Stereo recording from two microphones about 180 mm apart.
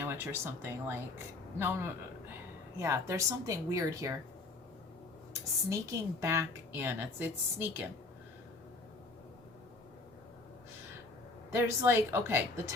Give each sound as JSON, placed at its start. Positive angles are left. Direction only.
{"t": 0.0, "sound": "a woman's voice", "side_deg": -15}
{"t": 5.6, "sound": "a woman's voice", "side_deg": -15}
{"t": 11.5, "sound": "a woman's voice", "side_deg": -15}